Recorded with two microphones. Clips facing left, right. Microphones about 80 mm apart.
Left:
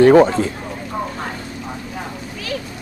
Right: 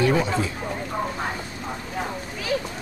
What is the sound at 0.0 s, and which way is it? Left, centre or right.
Speech, left.